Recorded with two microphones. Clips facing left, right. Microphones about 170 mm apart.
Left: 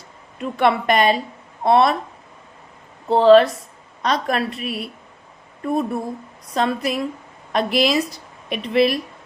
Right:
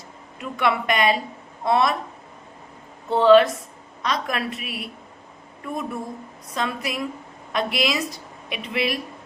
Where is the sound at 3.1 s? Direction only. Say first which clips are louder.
Left 3 dB; 35° left (ahead or behind).